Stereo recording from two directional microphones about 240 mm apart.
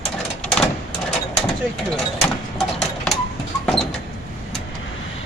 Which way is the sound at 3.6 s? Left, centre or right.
Centre.